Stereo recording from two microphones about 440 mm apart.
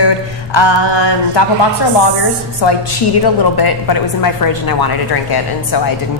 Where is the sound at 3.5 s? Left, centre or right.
Left.